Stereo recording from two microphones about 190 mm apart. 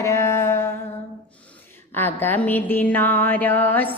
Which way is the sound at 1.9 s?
10° left (ahead or behind).